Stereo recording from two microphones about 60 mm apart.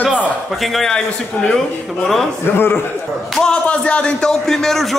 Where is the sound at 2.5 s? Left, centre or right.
Left.